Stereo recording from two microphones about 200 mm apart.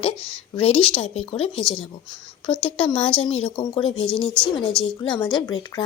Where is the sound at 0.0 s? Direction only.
30° left (ahead or behind).